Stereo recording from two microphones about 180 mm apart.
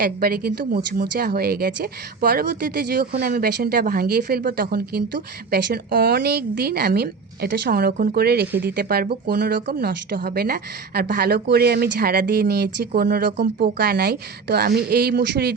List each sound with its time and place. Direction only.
0.0 s speech: 55° right (ahead or behind)